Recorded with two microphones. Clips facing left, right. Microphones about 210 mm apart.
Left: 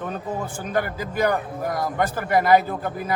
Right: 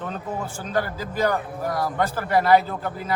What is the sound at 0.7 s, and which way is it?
A man's voice, 15° left (ahead or behind).